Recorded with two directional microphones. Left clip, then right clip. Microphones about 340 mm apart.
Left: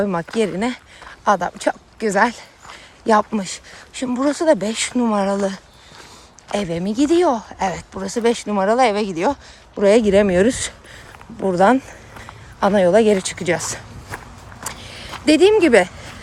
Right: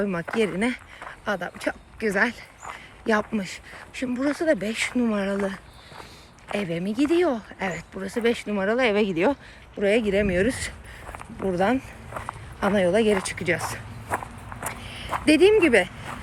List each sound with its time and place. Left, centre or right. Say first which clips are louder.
0.0 s speech: left 5 dB; centre
9.8 s speech: left 8 dB; centre
14.6 s walk: left 2 dB; centre
14.8 s a sound: left 3 dB; left
15.1 s speech: left 4 dB; centre